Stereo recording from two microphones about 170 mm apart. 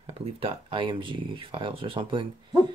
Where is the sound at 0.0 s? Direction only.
35° right (ahead or behind).